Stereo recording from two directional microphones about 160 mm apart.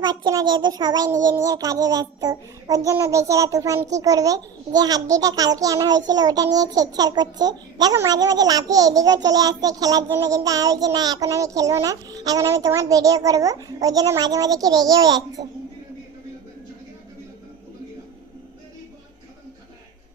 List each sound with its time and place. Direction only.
0.0 s a child's voice: 25° right (ahead or behind)